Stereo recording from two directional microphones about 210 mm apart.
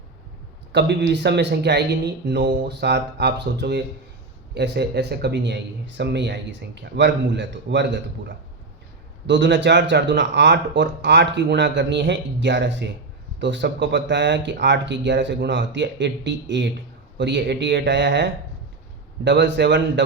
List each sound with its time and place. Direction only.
0.7 s speech: 55° right (ahead or behind)